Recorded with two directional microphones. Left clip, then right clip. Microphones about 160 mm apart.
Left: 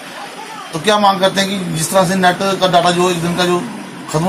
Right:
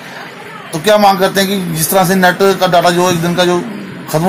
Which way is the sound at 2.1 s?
70° right (ahead or behind).